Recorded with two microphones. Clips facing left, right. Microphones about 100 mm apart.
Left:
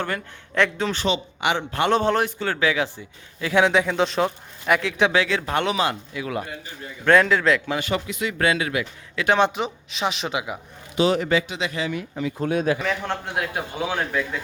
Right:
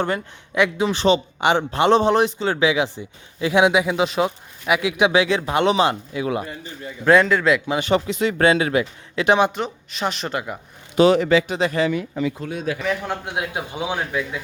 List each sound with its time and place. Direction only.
0.5 s speech: 10° right (ahead or behind)
1.0 s a man's voice: 35° right (ahead or behind)
7.1 s speech: centre (ahead or behind)
7.7 s a man's voice: 25° right (ahead or behind)
9.4 s speech: centre (ahead or behind)
10.9 s speech: 75° right (ahead or behind)
11.4 s speech: 45° right (ahead or behind)
12.4 s a man's voice: 45° left (ahead or behind)
12.8 s speech: 5° right (ahead or behind)
13.2 s speech: 20° right (ahead or behind)